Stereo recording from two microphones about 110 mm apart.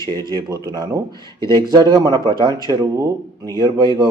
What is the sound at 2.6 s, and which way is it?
Speech, 30° right (ahead or behind).